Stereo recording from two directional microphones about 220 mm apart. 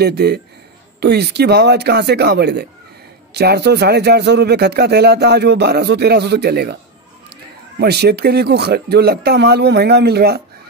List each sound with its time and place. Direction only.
0.0 s speech: 45° right (ahead or behind)
7.8 s speech: 45° right (ahead or behind)